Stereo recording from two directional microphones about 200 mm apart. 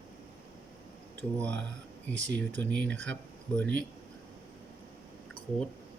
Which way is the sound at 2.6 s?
10° left (ahead or behind).